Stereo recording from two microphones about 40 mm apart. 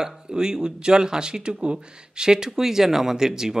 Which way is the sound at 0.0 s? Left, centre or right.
Centre.